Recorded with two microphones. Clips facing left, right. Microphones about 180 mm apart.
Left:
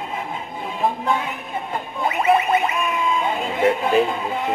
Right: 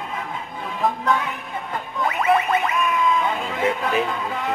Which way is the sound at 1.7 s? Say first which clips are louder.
Left 1 dB; 25° left (ahead or behind).